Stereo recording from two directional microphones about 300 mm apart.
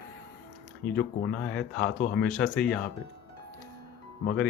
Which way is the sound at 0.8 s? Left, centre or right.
Centre.